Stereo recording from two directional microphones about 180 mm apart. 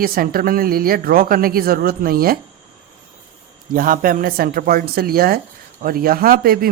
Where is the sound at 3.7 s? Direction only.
50° right (ahead or behind).